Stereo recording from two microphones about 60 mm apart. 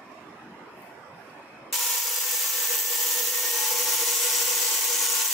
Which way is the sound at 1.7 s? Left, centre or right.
Centre.